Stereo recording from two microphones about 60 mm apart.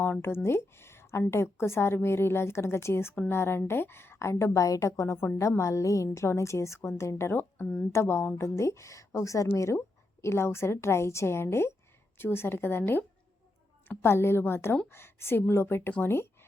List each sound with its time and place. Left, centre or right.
0.0 s speech: left
5.4 s a woman's voice: left